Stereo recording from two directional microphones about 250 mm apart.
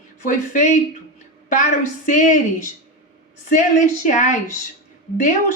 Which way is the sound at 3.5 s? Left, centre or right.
Left.